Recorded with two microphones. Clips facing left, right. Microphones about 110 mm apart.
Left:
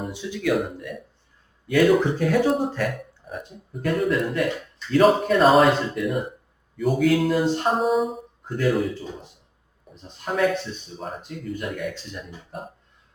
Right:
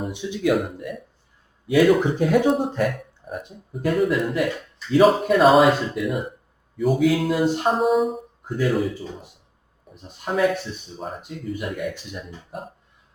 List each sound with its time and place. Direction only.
0.1 s speech: 20° right (ahead or behind)
1.6 s speech: 5° right (ahead or behind)
2.0 s speech: 20° right (ahead or behind)
2.5 s speech: centre (ahead or behind)
11.9 s speech: 10° right (ahead or behind)